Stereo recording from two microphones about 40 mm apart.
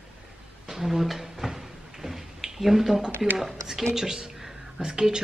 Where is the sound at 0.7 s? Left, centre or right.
Centre.